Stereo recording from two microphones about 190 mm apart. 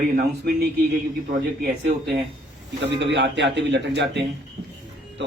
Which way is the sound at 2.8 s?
65° right (ahead or behind).